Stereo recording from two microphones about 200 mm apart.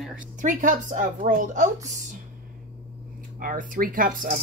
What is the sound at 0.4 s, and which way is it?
Speech, 40° right (ahead or behind).